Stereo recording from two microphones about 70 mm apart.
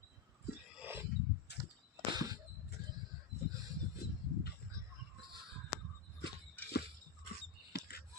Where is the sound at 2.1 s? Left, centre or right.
Right.